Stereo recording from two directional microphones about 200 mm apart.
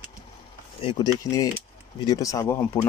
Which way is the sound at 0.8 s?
20° left (ahead or behind).